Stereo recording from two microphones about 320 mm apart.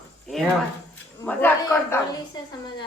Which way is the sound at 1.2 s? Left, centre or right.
Centre.